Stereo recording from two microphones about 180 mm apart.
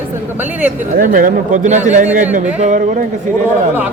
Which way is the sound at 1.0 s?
50° right (ahead or behind).